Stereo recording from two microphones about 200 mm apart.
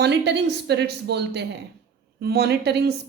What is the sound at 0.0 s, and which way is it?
A woman's voice, 60° right (ahead or behind).